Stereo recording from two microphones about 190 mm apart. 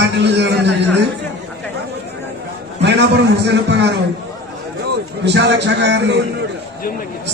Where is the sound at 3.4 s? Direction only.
65° right (ahead or behind).